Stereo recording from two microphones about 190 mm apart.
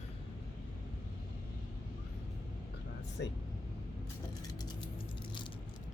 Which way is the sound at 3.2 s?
70° left (ahead or behind).